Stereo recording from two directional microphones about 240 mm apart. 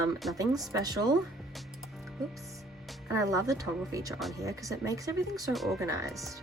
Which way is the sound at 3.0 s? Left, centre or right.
Centre.